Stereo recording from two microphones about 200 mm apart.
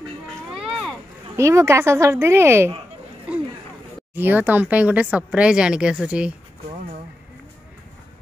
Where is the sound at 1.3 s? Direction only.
15° right (ahead or behind).